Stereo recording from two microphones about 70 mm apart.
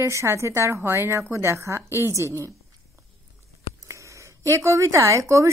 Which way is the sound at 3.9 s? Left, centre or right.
Right.